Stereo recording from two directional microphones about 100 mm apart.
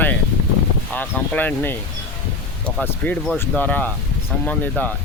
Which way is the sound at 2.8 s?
15° left (ahead or behind).